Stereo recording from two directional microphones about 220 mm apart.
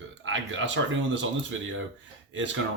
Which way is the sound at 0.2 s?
60° right (ahead or behind).